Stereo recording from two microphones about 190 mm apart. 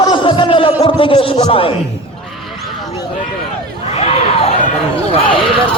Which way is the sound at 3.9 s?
30° left (ahead or behind).